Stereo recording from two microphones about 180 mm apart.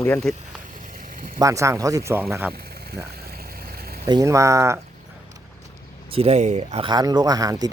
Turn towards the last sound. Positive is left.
turn(degrees=-20)  # may be behind; listen again after turning